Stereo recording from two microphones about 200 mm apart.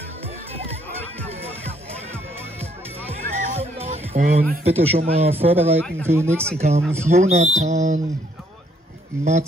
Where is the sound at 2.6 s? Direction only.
30° right (ahead or behind).